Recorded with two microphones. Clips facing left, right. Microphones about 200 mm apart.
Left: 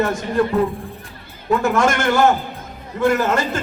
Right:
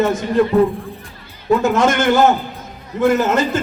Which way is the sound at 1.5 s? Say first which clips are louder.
Right 3 dB; 20° right (ahead or behind).